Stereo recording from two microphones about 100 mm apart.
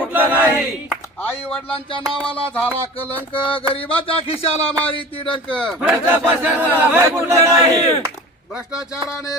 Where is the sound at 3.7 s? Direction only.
70° left (ahead or behind).